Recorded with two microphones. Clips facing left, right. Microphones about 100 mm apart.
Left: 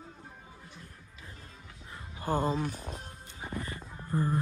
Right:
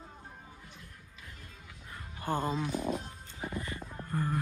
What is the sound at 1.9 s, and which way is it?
Music, 20° left (ahead or behind).